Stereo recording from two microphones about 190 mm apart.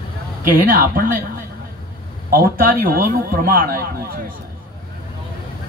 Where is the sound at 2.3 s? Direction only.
45° right (ahead or behind).